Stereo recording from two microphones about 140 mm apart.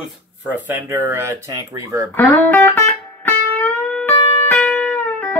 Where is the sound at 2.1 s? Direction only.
15° left (ahead or behind).